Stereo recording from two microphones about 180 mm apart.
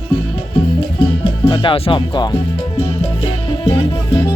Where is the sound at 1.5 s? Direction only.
30° left (ahead or behind).